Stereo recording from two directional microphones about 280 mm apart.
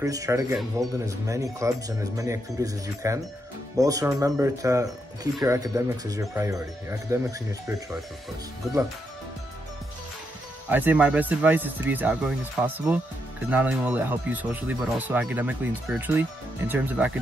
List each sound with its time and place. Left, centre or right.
0.0 s speech: centre
10.7 s speech: centre